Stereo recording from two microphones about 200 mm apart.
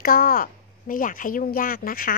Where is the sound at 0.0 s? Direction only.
45° left (ahead or behind).